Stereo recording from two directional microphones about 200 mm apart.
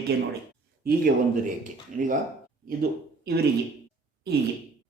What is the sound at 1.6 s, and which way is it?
Speech, 40° right (ahead or behind).